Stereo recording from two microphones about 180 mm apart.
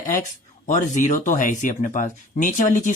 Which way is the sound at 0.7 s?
45° left (ahead or behind).